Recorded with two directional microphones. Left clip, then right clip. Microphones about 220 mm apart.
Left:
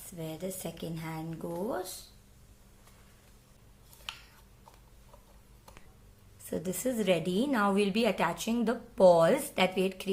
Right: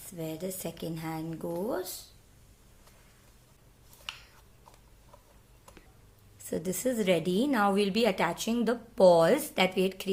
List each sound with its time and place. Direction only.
0.0 s a woman's voice: 15° right (ahead or behind)
4.1 s a sound: 5° left (ahead or behind)
6.4 s a woman's voice: 15° right (ahead or behind)